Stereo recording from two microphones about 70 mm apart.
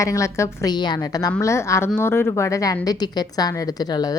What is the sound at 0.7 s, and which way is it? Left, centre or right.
Speech, left.